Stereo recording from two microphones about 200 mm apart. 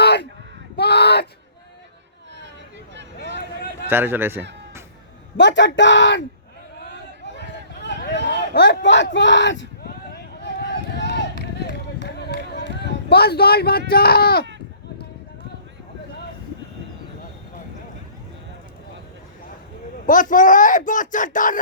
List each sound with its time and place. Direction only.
0.0 s a sound: 55° left (ahead or behind)
3.8 s speech: 10° right (ahead or behind)
5.4 s speech: 60° left (ahead or behind)
7.3 s a sound: 60° left (ahead or behind)
9.1 s speech: 65° left (ahead or behind)
10.4 s run: 55° left (ahead or behind)
20.1 s speech: 40° left (ahead or behind)